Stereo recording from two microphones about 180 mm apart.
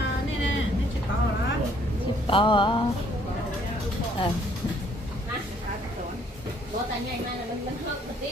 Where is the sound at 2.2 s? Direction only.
30° left (ahead or behind).